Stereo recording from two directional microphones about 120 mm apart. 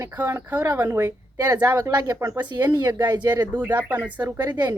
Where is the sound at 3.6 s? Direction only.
15° right (ahead or behind).